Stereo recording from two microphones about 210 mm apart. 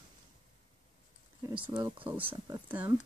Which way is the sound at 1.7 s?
20° right (ahead or behind).